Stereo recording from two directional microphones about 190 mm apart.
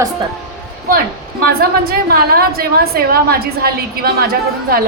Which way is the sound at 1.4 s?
50° right (ahead or behind).